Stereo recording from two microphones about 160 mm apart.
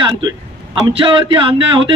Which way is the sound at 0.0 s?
25° right (ahead or behind).